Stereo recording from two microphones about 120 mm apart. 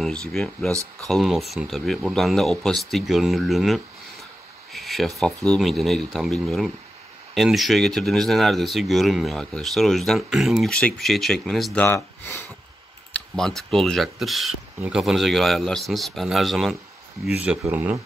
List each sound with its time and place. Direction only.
0.0 s speech: 5° left (ahead or behind)
11.8 s speech: 20° left (ahead or behind)
13.1 s speech: 5° left (ahead or behind)
17.4 s speech: 10° right (ahead or behind)